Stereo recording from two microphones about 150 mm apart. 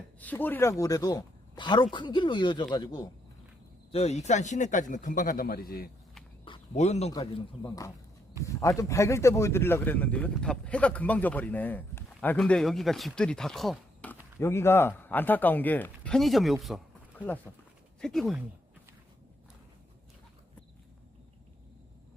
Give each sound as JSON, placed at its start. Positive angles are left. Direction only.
{"t": 0.2, "sound": "speech", "side_deg": 10}
{"t": 3.9, "sound": "a man's voice", "side_deg": 45}
{"t": 6.7, "sound": "a man's voice", "side_deg": 45}
{"t": 7.6, "sound": "speech", "side_deg": 20}
{"t": 14.1, "sound": "speech", "side_deg": 15}
{"t": 17.2, "sound": "speech", "side_deg": 10}